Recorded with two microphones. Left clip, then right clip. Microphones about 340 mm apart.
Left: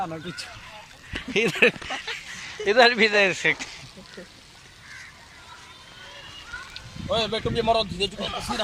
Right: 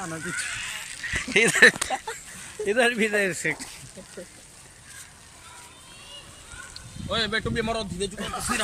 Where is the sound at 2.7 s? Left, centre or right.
Centre.